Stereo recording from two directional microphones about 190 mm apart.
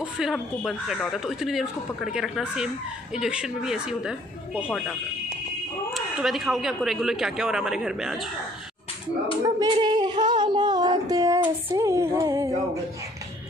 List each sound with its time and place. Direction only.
0.0 s speech: centre (ahead or behind)
5.9 s speech: centre (ahead or behind)
9.4 s a child's voice: 20° right (ahead or behind)
10.2 s child singing: 25° right (ahead or behind)